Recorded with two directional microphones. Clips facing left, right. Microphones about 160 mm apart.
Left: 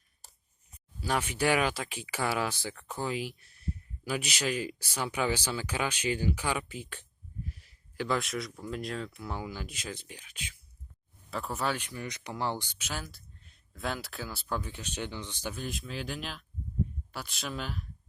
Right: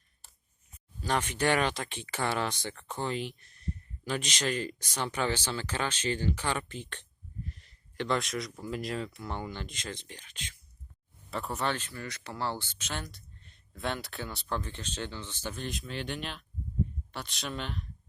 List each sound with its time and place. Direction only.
0.2 s a sound: 40° left (ahead or behind)
1.0 s speech: 10° left (ahead or behind)
11.8 s speech: 15° left (ahead or behind)